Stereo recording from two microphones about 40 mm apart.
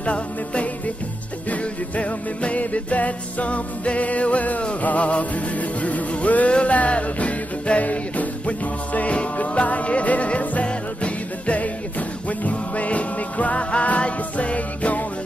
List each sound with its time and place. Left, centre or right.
0.0 s music: left